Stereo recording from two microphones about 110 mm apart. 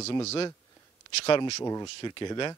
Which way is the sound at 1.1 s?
70° left (ahead or behind).